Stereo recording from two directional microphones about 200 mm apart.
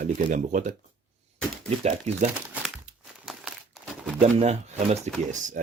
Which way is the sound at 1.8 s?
35° right (ahead or behind).